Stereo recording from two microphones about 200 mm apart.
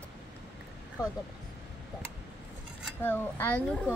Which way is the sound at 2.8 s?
10° left (ahead or behind).